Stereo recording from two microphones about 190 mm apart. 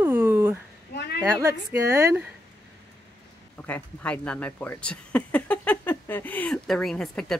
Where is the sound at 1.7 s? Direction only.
15° right (ahead or behind).